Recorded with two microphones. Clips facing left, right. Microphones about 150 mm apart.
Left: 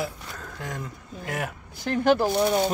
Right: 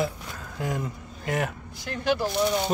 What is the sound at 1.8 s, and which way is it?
Speech, 50° left (ahead or behind).